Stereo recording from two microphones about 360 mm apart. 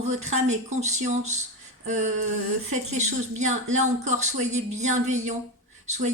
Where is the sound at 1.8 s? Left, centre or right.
Centre.